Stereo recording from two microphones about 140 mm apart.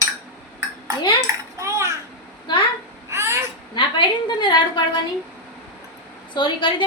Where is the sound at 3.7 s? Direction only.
35° left (ahead or behind).